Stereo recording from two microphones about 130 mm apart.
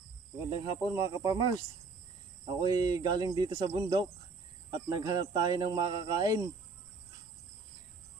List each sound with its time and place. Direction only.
0.5 s speech: 35° right (ahead or behind)
2.6 s speech: 30° right (ahead or behind)